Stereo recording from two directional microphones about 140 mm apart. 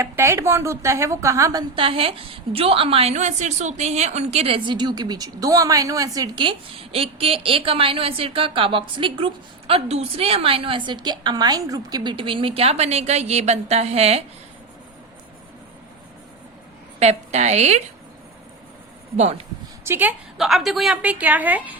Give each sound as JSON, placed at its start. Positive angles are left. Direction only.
{"t": 0.0, "sound": "a woman's voice", "side_deg": -20}
{"t": 1.7, "sound": "a woman's voice", "side_deg": -40}
{"t": 17.0, "sound": "a woman's voice", "side_deg": -55}
{"t": 19.1, "sound": "a woman's voice", "side_deg": -50}
{"t": 19.8, "sound": "a woman's voice", "side_deg": -15}
{"t": 20.4, "sound": "a woman's voice", "side_deg": 0}